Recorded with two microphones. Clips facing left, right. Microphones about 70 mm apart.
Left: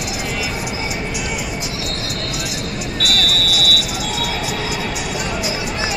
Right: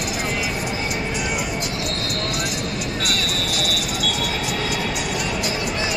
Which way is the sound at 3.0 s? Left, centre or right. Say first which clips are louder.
Left 8 dB; left.